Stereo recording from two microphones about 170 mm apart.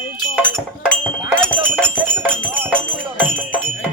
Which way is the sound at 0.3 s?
10° right (ahead or behind).